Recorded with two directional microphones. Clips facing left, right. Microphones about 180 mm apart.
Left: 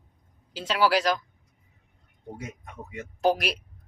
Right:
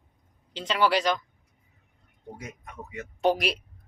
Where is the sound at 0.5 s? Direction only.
5° left (ahead or behind).